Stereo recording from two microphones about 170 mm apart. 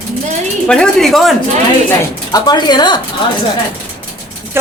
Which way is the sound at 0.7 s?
5° left (ahead or behind).